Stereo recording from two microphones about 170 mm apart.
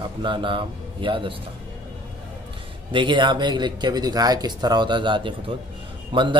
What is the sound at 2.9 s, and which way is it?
Speech, 30° right (ahead or behind).